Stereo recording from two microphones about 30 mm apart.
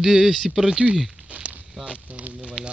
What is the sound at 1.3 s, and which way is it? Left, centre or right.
Walk, right.